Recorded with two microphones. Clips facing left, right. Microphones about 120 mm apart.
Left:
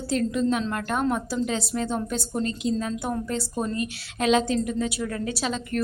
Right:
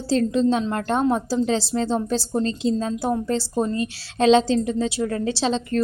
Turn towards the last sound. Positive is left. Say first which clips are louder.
# right 6 dB
turn(degrees=-30)  # may be behind; listen again after turning